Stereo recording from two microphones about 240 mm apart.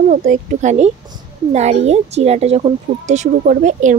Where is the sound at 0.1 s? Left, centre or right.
Right.